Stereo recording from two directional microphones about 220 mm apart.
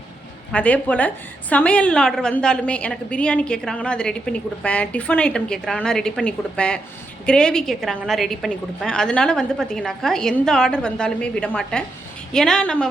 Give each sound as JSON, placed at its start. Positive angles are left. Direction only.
{"t": 0.5, "sound": "a woman's voice", "side_deg": 5}